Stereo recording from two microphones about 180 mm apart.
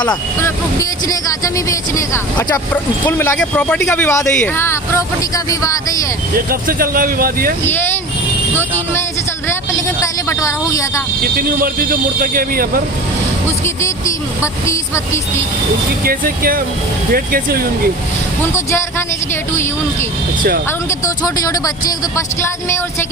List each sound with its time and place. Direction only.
0.0 s speech: 20° left (ahead or behind)
6.3 s speech: 55° right (ahead or behind)
10.2 s speech: 15° left (ahead or behind)
11.2 s speech: 55° right (ahead or behind)
13.8 s speech: 15° left (ahead or behind)
16.0 s speech: 55° right (ahead or behind)
18.5 s speech: 15° left (ahead or behind)